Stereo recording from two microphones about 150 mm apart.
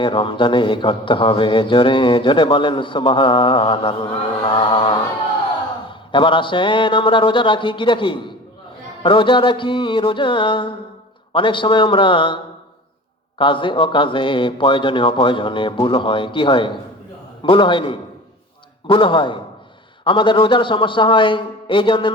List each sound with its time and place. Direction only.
0.0 s a man's voice: 35° left (ahead or behind)
13.4 s a man's voice: 35° left (ahead or behind)